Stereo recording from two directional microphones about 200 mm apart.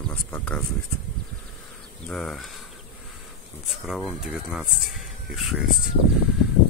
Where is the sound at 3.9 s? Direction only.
Centre (ahead or behind).